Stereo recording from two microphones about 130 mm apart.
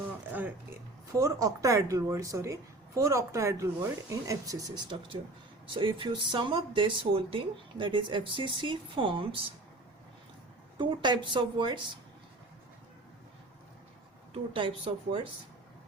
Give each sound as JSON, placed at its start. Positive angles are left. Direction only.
{"t": 1.1, "sound": "speech", "side_deg": -25}
{"t": 10.8, "sound": "speech", "side_deg": -35}
{"t": 14.3, "sound": "speech", "side_deg": -45}